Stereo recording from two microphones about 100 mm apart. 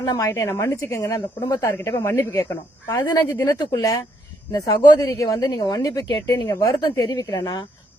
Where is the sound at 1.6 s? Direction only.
25° left (ahead or behind).